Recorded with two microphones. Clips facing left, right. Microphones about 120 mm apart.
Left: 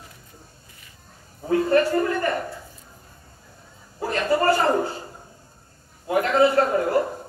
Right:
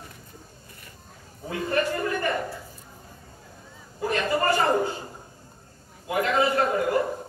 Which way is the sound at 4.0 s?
35° left (ahead or behind).